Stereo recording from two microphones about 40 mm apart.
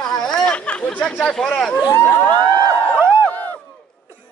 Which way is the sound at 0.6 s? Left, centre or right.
Left.